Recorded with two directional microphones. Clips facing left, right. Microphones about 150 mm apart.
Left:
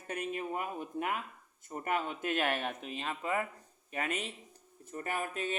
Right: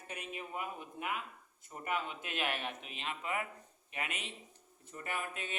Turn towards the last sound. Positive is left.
turn(degrees=40)  # may be behind; listen again after turning